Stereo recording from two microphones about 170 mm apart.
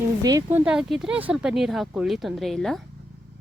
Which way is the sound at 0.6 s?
5° right (ahead or behind).